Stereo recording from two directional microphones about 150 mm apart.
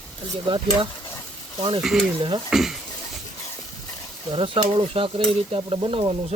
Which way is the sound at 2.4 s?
Centre (ahead or behind).